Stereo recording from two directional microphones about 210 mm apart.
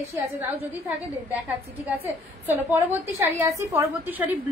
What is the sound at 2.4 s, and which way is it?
A woman's voice, 10° right (ahead or behind).